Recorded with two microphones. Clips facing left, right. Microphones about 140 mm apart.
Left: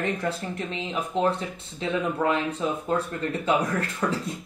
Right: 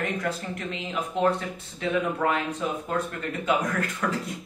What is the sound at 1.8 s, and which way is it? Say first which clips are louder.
Speech: even; 25° left (ahead or behind).